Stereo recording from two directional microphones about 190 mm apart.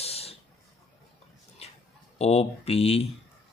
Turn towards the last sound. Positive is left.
turn(degrees=30)  # may be behind; listen again after turning